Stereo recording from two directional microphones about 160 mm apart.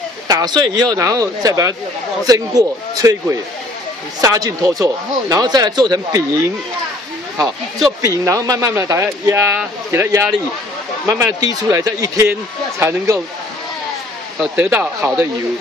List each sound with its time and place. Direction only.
0.3 s speech: 25° right (ahead or behind)
8.0 s speech: 20° right (ahead or behind)
14.4 s speech: 10° right (ahead or behind)